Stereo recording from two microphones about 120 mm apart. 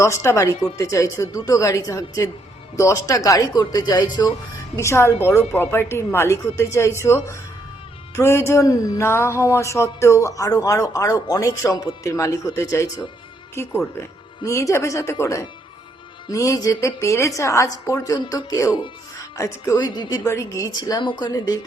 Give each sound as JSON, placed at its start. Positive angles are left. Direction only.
{"t": 0.0, "sound": "a woman's voice", "side_deg": 20}
{"t": 4.8, "sound": "speech", "side_deg": 20}
{"t": 19.8, "sound": "a woman's voice", "side_deg": 40}